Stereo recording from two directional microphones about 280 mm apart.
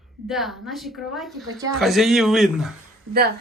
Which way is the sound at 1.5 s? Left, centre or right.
Centre.